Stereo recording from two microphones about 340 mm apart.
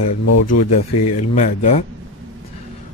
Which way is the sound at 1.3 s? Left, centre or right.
Centre.